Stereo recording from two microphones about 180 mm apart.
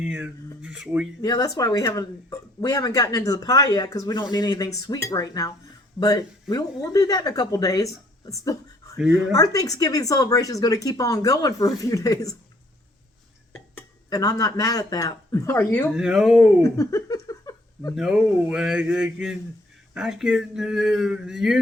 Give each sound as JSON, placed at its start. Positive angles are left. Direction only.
{"t": 0.0, "sound": "speech", "side_deg": -5}
{"t": 1.2, "sound": "speech", "side_deg": 20}
{"t": 13.7, "sound": "speech", "side_deg": 20}
{"t": 15.9, "sound": "speech", "side_deg": -5}
{"t": 16.6, "sound": "a sound", "side_deg": 15}
{"t": 17.9, "sound": "speech", "side_deg": -5}